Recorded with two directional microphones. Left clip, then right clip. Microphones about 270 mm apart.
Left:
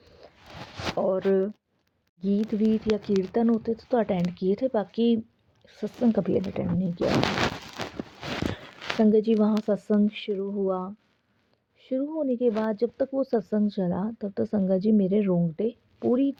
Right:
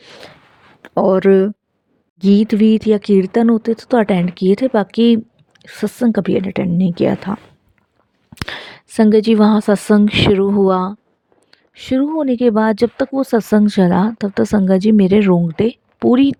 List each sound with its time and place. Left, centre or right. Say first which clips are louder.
0.0 s a sound: right 14 dB; right
0.9 s speech: right 13 dB; right
8.5 s speech: right 14 dB; right